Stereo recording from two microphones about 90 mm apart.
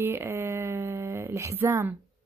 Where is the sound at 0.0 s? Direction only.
30° right (ahead or behind).